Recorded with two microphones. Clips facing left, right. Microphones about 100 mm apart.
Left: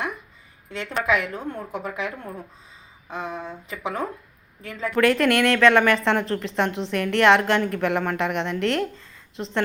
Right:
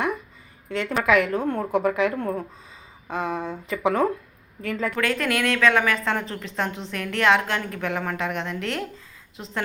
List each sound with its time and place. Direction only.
0.7 s a woman's voice: 50° right (ahead or behind); by 4.1 s 65° right (ahead or behind)
4.6 s a woman's voice: 55° right (ahead or behind)
4.9 s a woman's voice: centre (ahead or behind)